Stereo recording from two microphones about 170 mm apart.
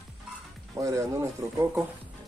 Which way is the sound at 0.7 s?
20° right (ahead or behind).